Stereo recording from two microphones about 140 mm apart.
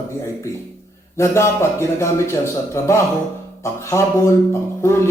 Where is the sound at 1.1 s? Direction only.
20° left (ahead or behind).